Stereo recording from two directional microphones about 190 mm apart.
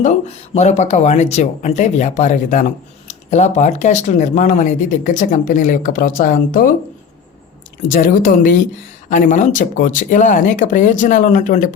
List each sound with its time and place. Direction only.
0.0 s speech: 35° left (ahead or behind)
7.9 s speech: 45° left (ahead or behind)